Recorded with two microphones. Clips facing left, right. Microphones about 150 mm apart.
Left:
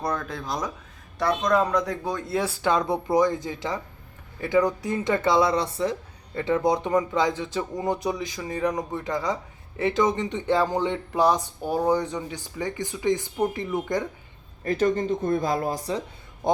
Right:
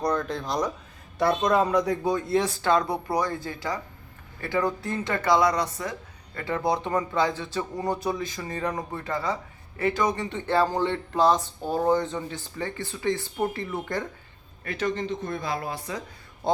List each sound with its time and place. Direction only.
0.0 s speech: 5° left (ahead or behind)
2.6 s speech: 20° left (ahead or behind)
14.6 s speech: 40° left (ahead or behind)